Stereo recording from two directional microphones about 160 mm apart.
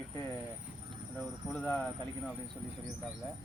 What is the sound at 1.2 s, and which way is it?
Speech, 5° left (ahead or behind).